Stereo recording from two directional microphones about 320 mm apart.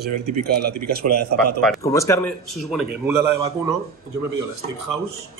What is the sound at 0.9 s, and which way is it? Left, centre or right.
Speech, right.